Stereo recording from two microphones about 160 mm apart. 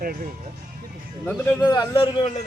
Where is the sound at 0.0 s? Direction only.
65° right (ahead or behind).